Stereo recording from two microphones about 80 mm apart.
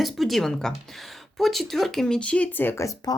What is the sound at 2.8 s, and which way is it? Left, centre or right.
Speech, left.